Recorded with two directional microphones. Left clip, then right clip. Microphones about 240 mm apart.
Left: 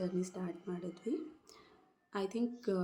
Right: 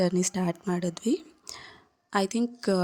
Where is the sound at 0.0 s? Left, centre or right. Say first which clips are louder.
Right 13 dB; right.